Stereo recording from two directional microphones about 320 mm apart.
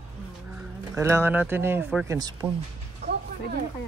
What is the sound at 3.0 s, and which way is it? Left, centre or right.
Music, right.